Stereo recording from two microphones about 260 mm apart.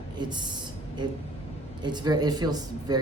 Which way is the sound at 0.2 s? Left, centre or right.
Centre.